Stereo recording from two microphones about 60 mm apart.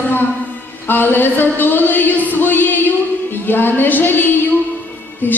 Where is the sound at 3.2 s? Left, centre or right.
Left.